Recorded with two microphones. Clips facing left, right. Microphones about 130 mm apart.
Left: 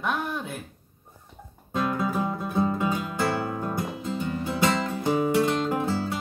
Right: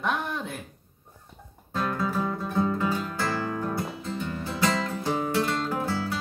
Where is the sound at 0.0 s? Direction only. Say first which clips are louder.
Even; centre (ahead or behind).